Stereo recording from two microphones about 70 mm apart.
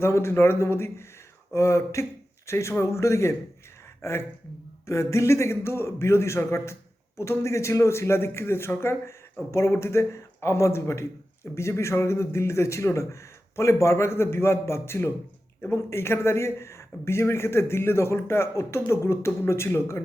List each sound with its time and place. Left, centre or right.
0.0 s a man's voice: left